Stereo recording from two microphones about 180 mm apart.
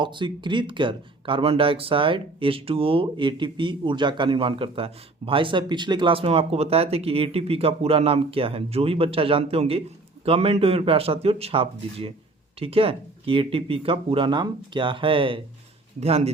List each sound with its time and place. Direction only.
0.0 s speech: 25° right (ahead or behind)